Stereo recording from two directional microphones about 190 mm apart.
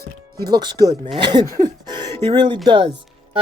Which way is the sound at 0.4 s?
20° right (ahead or behind).